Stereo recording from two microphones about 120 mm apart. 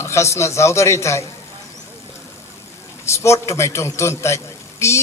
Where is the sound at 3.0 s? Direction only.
20° left (ahead or behind).